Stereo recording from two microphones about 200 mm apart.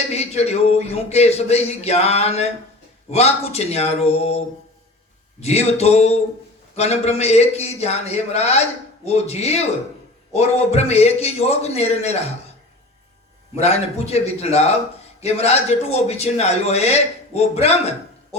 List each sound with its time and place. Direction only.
0.1 s a man's voice: 30° left (ahead or behind)
13.6 s a man's voice: 30° left (ahead or behind)